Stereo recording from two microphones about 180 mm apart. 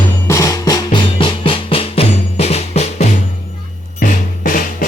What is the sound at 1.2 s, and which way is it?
Music, 30° left (ahead or behind).